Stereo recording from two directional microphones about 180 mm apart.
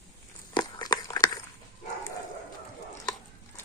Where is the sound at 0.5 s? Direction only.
25° left (ahead or behind).